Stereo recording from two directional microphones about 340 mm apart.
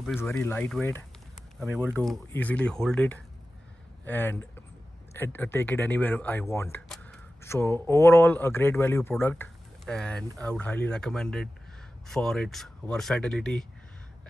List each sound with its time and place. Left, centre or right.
0.0 s speech: centre